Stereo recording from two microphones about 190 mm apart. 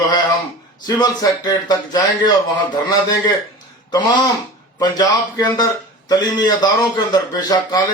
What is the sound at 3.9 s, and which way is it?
A man's voice, 20° left (ahead or behind).